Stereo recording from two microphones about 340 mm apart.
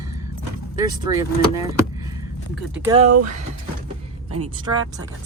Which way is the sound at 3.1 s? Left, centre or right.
Right.